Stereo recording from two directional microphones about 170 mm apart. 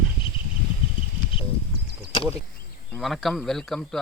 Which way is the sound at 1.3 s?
30° left (ahead or behind).